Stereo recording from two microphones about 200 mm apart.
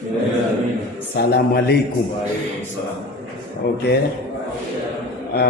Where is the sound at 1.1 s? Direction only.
50° left (ahead or behind).